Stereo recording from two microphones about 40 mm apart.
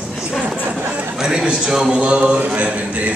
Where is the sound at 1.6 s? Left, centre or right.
Centre.